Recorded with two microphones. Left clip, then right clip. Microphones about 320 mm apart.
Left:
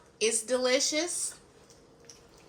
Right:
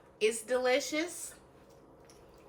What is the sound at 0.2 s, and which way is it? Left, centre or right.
Speech, centre.